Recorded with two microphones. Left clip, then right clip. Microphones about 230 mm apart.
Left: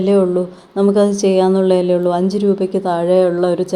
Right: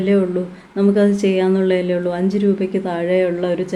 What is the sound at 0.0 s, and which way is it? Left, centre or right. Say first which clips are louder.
Speech: left 4 dB; centre.